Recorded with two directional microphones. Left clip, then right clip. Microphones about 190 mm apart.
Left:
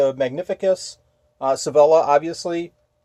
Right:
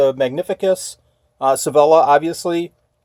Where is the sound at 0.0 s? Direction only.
35° right (ahead or behind).